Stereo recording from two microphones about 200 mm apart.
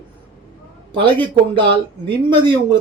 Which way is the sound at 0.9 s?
25° right (ahead or behind).